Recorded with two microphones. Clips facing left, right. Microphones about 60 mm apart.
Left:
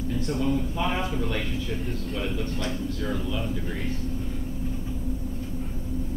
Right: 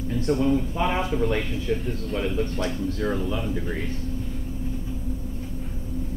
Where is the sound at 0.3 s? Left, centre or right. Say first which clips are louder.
Right 6 dB; centre.